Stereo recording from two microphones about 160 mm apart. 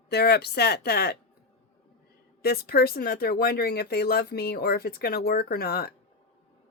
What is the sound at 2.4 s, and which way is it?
Speech, 80° left.